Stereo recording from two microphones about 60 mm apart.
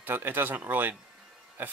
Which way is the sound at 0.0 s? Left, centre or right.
Right.